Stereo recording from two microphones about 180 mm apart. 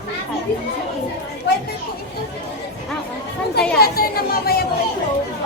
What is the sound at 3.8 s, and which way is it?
Speech, 55° left (ahead or behind).